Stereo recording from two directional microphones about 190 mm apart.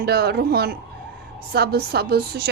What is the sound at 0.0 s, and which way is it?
A woman's voice, 60° right (ahead or behind).